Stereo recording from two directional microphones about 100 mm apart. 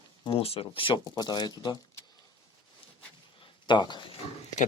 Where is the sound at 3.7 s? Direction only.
50° left (ahead or behind).